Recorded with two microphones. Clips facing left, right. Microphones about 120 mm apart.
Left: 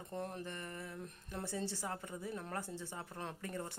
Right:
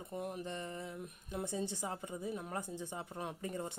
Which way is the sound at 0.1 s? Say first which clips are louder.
Right 2 dB; 10° right (ahead or behind).